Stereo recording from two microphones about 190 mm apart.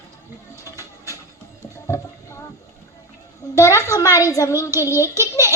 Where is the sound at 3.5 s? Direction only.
15° left (ahead or behind).